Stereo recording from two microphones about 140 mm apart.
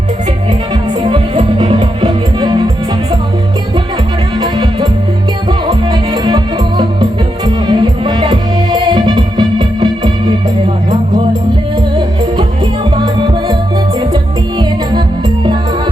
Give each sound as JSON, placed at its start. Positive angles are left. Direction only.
{"t": 1.0, "sound": "music", "side_deg": -35}
{"t": 4.4, "sound": "music", "side_deg": -30}
{"t": 13.0, "sound": "music", "side_deg": -30}